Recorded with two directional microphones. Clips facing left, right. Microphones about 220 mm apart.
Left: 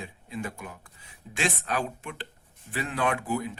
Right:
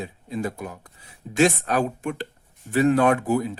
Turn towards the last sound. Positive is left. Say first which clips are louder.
# right 8 dB
turn(degrees=-40)  # may be behind; listen again after turning